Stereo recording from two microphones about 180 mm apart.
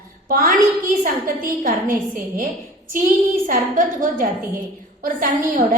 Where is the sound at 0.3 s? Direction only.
50° right (ahead or behind).